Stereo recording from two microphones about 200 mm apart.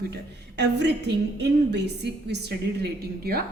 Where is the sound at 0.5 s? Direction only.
55° right (ahead or behind).